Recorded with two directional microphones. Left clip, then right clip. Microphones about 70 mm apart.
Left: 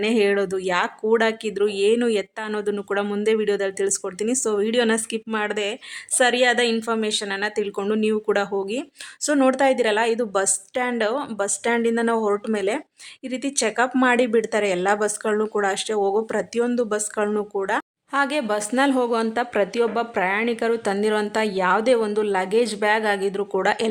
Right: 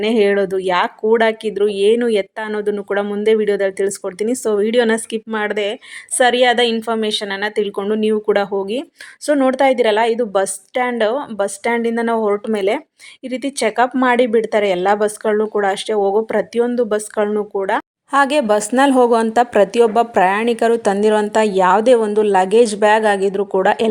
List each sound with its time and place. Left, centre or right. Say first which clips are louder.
0.0 s speech: right 5 dB; right
7.8 s speech: right 3 dB; centre
9.2 s speech: right 4 dB; centre
9.6 s speech: right 6 dB; centre
17.2 s speech: right 5 dB; centre
17.6 s speech: right 5 dB; centre
18.1 s a woman's voice: right 8 dB; right
18.8 s a woman's voice: right 7 dB; right
23.4 s a woman's voice: right 6 dB; right